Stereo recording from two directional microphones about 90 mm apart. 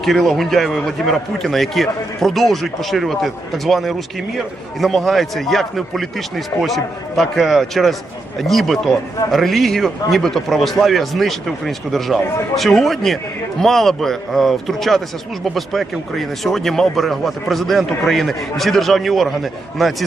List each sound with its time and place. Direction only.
0.0 s a man's voice: 5° left (ahead or behind)